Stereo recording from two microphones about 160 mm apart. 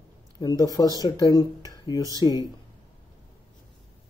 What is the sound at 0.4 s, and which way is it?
Speech, 25° left (ahead or behind).